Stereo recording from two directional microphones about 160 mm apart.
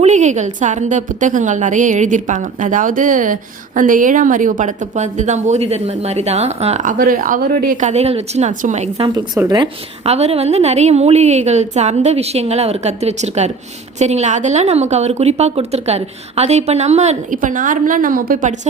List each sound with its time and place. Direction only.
0.0 s a woman's voice: 50° right (ahead or behind)
9.0 s speech: 25° right (ahead or behind)
10.0 s a woman's voice: 40° right (ahead or behind)